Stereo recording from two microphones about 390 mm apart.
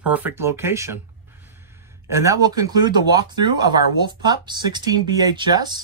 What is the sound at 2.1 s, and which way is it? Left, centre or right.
A man's voice, centre.